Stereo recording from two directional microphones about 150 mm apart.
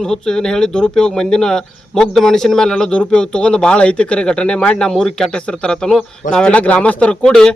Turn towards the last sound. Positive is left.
turn(degrees=5)  # may be behind; listen again after turning